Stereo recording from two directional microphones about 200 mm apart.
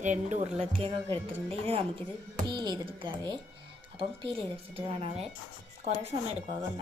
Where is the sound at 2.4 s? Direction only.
20° right (ahead or behind).